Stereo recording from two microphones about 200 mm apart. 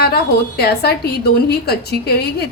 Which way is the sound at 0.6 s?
50° left (ahead or behind).